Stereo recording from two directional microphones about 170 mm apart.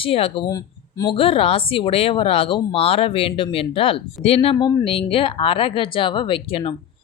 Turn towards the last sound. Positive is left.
turn(degrees=30)  # may be behind; listen again after turning